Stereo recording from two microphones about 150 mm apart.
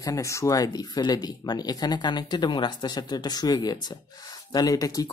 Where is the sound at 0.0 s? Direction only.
20° left (ahead or behind).